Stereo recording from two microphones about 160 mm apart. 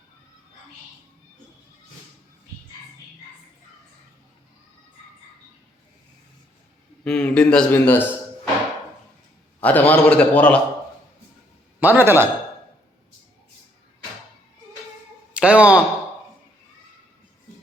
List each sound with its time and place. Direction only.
7.0 s speech: 5° left (ahead or behind)
9.6 s a man's voice: 10° left (ahead or behind)
11.8 s a man's voice: 15° right (ahead or behind)
15.3 s speech: 10° right (ahead or behind)